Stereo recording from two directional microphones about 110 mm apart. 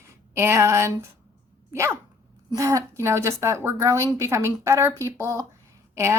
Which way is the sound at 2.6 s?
30° right (ahead or behind).